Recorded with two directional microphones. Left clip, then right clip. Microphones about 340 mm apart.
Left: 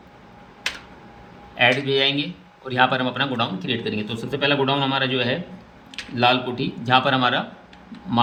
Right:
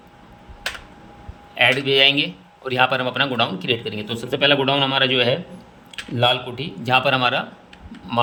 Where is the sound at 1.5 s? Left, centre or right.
Right.